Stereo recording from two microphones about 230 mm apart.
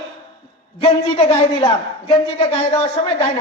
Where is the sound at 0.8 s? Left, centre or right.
Left.